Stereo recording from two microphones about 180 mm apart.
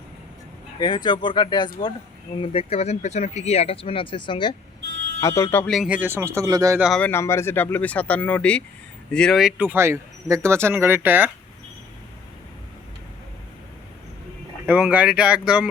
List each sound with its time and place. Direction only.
0.8 s speech: 25° left (ahead or behind)
5.2 s speech: 15° left (ahead or behind)
5.7 s speech: 5° right (ahead or behind)
6.7 s speech: 5° right (ahead or behind)
7.0 s speech: 15° left (ahead or behind); by 11.3 s 10° right (ahead or behind)
14.7 s speech: 5° right (ahead or behind)